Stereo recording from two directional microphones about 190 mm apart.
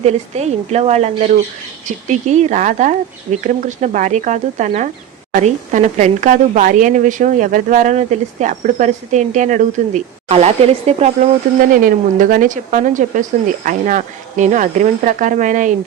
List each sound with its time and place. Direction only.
0.0 s speech: 35° right (ahead or behind)
11.7 s speech: 45° right (ahead or behind)